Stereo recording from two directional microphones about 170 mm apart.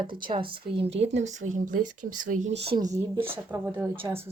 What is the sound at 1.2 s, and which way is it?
Speech, 45° right (ahead or behind).